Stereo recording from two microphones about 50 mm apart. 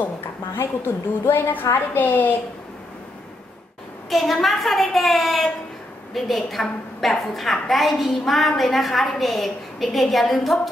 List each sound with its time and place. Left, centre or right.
0.6 s a woman's voice: left
4.1 s a woman's voice: centre